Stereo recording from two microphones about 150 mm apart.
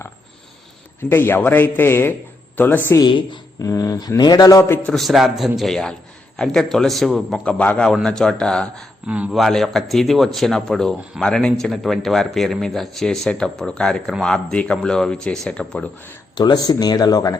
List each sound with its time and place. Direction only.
1.1 s a man's voice: 15° left (ahead or behind)
3.0 s a woman's voice: 30° left (ahead or behind)
4.8 s speech: centre (ahead or behind)
9.0 s speech: 10° right (ahead or behind)
16.3 s speech: 25° left (ahead or behind)